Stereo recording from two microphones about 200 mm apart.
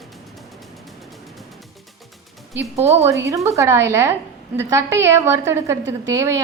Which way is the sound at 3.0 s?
15° right (ahead or behind).